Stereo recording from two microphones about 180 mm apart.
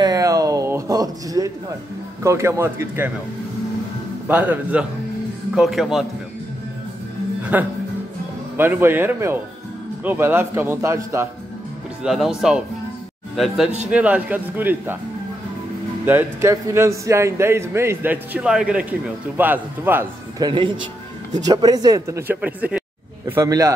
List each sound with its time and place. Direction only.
0.0 s a sound: 20° right (ahead or behind)
2.2 s a man's voice: 15° right (ahead or behind)
4.3 s a man's voice: 10° right (ahead or behind)
7.5 s a man's voice: 10° right (ahead or behind)
12.0 s speech: 5° right (ahead or behind)
13.8 s a man's voice: 5° right (ahead or behind)
16.1 s a man's voice: 15° right (ahead or behind)
20.4 s speech: 25° right (ahead or behind)